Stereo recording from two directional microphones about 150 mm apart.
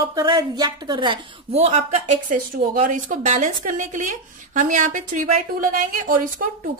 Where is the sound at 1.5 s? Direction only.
45° right (ahead or behind).